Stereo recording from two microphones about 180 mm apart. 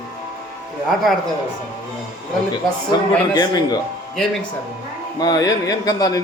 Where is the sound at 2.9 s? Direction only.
20° left (ahead or behind).